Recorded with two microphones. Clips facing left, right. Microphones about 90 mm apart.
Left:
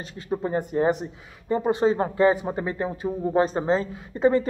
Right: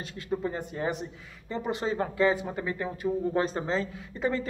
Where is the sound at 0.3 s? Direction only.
25° left (ahead or behind).